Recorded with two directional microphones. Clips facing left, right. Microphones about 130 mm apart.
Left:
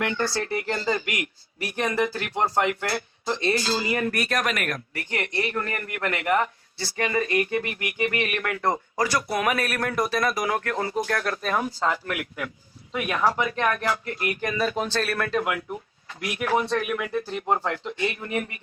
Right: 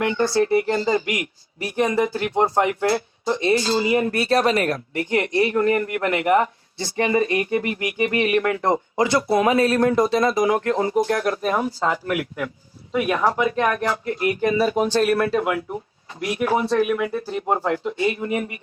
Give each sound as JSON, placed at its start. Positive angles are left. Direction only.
{"t": 0.0, "sound": "speech", "side_deg": -20}
{"t": 12.9, "sound": "speech", "side_deg": -25}
{"t": 14.6, "sound": "speech", "side_deg": -15}
{"t": 15.4, "sound": "speech", "side_deg": -30}